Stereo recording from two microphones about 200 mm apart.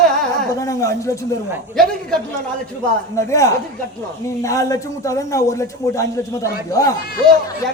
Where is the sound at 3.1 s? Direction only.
15° left (ahead or behind).